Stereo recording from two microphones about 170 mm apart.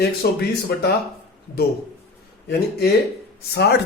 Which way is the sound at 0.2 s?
65° left (ahead or behind).